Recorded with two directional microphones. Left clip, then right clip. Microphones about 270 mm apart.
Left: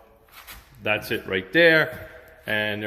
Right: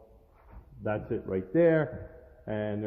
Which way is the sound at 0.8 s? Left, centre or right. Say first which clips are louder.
Left 7 dB; centre.